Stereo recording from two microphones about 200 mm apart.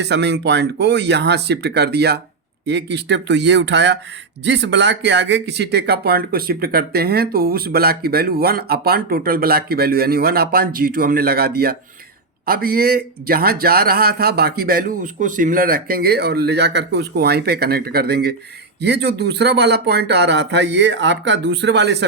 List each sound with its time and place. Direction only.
0.0 s speech: 60° right (ahead or behind)